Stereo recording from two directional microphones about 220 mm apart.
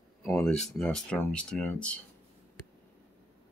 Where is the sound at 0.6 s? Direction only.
Centre (ahead or behind).